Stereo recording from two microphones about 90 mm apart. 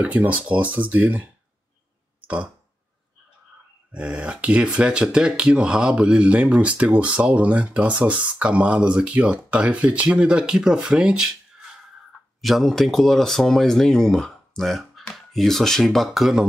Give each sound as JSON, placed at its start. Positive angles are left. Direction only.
{"t": 0.0, "sound": "speech", "side_deg": -15}
{"t": 2.2, "sound": "a sound", "side_deg": -15}
{"t": 3.9, "sound": "speech", "side_deg": -15}